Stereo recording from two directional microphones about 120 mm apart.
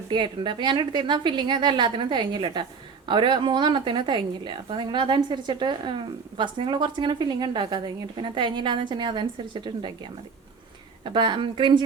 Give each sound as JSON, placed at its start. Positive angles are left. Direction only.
{"t": 0.1, "sound": "a woman's voice", "side_deg": -40}
{"t": 11.0, "sound": "a woman's voice", "side_deg": -40}